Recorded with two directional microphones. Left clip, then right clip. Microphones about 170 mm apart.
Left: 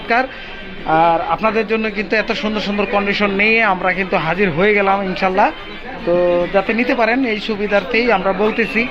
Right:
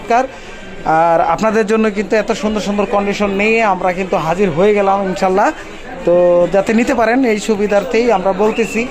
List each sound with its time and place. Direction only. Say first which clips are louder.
0.9 s speech: right 3 dB; 65° right (ahead or behind)
1.8 s speech: right 3 dB; 40° right (ahead or behind); by 4.9 s 20° right (ahead or behind)
5.1 s speech: right 3 dB; 35° right (ahead or behind)
6.1 s speech: right 4 dB; 50° right (ahead or behind)
6.6 s speech: right 2 dB; 90° right; by 7.8 s 55° right (ahead or behind)
7.8 s speech: even; 35° right (ahead or behind)
8.4 s speech: right 2 dB; 20° right (ahead or behind)